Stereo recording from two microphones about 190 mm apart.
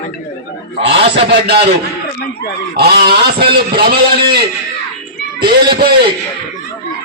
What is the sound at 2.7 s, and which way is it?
A man's voice, 55° right (ahead or behind).